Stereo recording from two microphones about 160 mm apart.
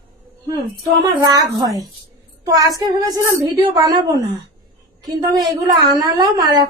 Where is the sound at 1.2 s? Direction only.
25° right (ahead or behind).